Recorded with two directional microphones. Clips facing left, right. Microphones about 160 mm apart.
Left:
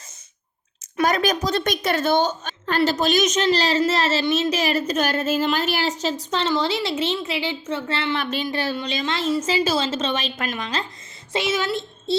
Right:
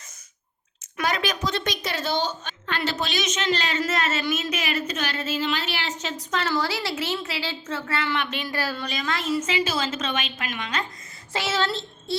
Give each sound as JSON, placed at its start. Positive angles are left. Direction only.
{"t": 1.0, "sound": "a woman's voice", "side_deg": 45}
{"t": 6.3, "sound": "a woman's voice", "side_deg": 25}
{"t": 8.4, "sound": "a woman's voice", "side_deg": 25}
{"t": 11.3, "sound": "a woman's voice", "side_deg": 20}